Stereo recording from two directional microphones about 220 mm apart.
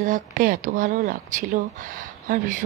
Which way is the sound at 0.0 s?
40° right (ahead or behind).